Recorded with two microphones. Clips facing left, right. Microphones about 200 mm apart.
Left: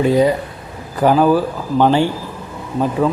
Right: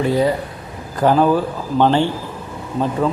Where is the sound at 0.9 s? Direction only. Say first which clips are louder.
Left 2 dB; 10° left (ahead or behind).